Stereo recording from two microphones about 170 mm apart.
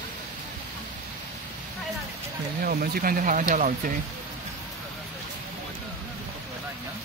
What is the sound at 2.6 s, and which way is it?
Speech, 60° right (ahead or behind).